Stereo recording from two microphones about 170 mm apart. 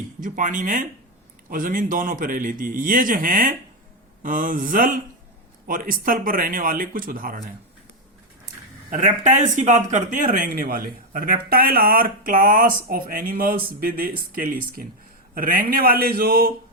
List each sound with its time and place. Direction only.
0.2 s a man's voice: 50° right (ahead or behind)
8.9 s a man's voice: 45° right (ahead or behind); by 16.5 s 65° right (ahead or behind)